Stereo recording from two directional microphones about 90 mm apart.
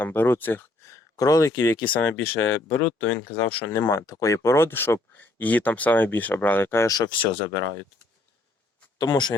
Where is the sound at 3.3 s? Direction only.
90° left.